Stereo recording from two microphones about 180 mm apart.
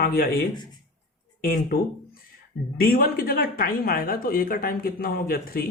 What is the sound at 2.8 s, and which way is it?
A woman's voice, 55° left (ahead or behind).